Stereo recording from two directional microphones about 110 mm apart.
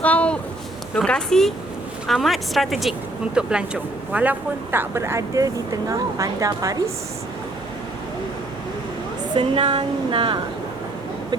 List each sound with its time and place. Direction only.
0.0 s a sound: 10° left (ahead or behind)
0.9 s a woman's voice: 5° left (ahead or behind); by 6.9 s 35° right (ahead or behind)
9.3 s speech: 50° right (ahead or behind)